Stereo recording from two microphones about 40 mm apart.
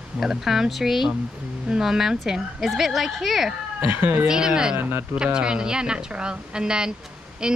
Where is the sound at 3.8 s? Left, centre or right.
Right.